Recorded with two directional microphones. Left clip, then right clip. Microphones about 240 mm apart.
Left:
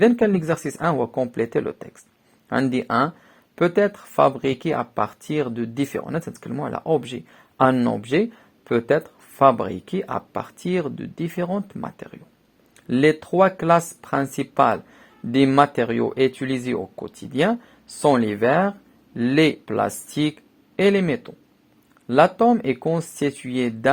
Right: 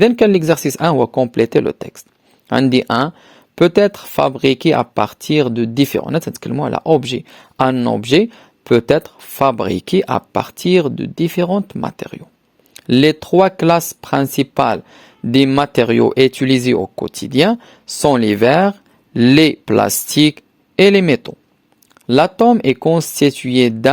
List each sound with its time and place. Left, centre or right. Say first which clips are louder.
0.0 s speech: right 7 dB; right